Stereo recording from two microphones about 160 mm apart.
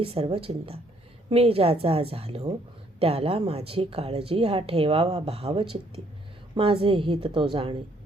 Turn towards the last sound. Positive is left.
turn(degrees=-35)  # may be behind; listen again after turning